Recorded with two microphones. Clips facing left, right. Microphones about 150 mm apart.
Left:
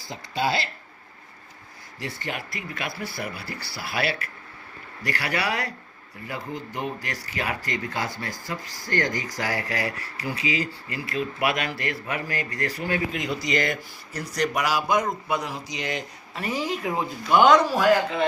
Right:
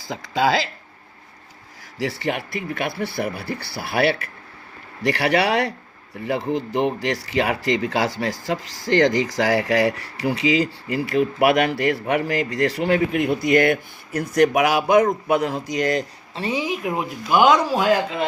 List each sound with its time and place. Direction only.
0.0 s speech: 90° right
2.0 s speech: 80° right; by 4.1 s 60° right (ahead or behind)
5.0 s speech: 70° right (ahead or behind)
15.6 s speech: 45° right (ahead or behind)
16.3 s speech: 25° right (ahead or behind)
17.2 s a man's voice: 5° right (ahead or behind)